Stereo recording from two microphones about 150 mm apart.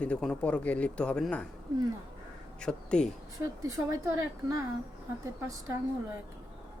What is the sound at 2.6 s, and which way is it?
Speech, 5° left (ahead or behind).